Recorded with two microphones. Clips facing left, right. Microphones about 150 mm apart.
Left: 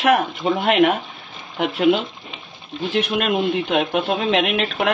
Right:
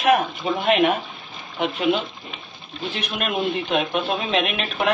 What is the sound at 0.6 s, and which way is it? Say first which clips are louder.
Speech: left 2 dB; 65° left (ahead or behind).